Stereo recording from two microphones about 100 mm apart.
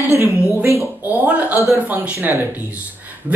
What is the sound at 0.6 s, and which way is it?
Speech, 30° right (ahead or behind).